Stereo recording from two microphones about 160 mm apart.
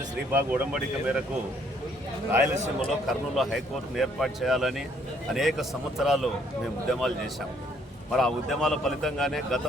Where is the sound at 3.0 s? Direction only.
Centre (ahead or behind).